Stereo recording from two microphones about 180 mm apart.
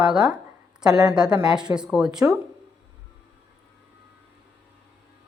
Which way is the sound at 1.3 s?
5° right (ahead or behind).